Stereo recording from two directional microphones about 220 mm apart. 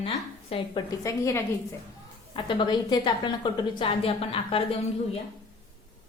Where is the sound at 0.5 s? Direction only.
20° left (ahead or behind).